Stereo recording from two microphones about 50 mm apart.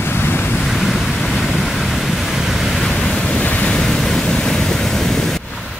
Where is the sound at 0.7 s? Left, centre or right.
Centre.